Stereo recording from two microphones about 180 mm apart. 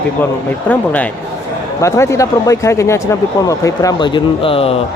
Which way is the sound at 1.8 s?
15° left (ahead or behind).